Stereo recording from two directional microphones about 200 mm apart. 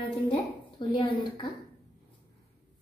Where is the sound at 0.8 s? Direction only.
25° left (ahead or behind).